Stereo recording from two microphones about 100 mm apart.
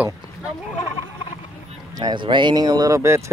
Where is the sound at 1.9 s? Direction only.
50° right (ahead or behind); by 3.3 s 30° right (ahead or behind).